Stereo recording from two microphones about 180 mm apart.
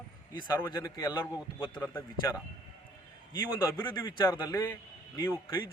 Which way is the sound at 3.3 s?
15° left (ahead or behind).